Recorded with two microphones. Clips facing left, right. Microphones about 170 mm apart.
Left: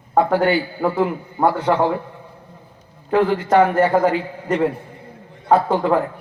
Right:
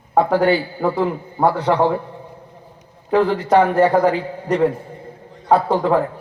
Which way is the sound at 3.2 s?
35° right (ahead or behind).